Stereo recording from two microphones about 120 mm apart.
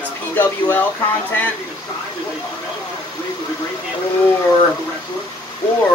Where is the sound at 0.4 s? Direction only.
15° left (ahead or behind).